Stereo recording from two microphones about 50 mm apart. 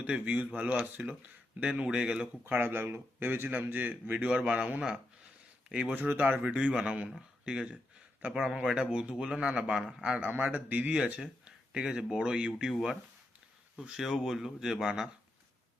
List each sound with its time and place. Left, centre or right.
0.0 s speech: right
2.4 s a man's voice: right
4.2 s speech: right
5.6 s speech: centre
5.9 s speech: right
6.4 s a man's voice: right
13.9 s a man's voice: centre